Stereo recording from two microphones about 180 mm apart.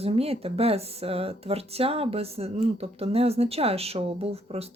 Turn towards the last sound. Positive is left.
turn(degrees=-35)  # may be behind; listen again after turning